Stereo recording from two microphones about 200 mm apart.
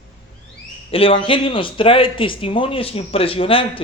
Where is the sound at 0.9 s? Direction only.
25° left (ahead or behind).